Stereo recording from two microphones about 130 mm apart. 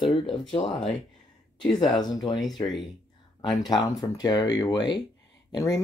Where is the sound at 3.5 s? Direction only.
30° left (ahead or behind).